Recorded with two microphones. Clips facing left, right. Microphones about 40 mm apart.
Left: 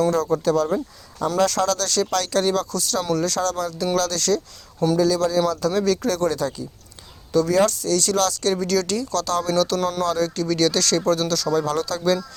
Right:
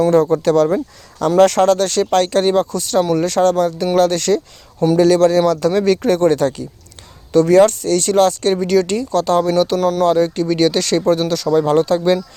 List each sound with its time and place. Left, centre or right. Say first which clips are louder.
0.1 s speech: right 8 dB; right
0.4 s speech: right 6 dB; right
4.9 s speech: right 9 dB; right
8.5 s speech: right 6 dB; right